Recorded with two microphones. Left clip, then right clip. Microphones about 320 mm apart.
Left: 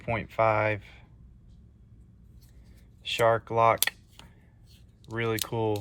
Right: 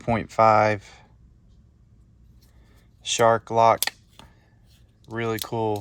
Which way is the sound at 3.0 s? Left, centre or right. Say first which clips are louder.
Right 5 dB; centre.